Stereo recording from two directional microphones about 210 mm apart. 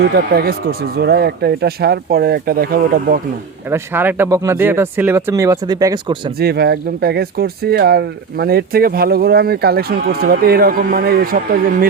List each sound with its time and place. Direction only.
0.0 s speech: 50° right (ahead or behind)
3.7 s speech: 10° right (ahead or behind)
6.4 s speech: 50° right (ahead or behind)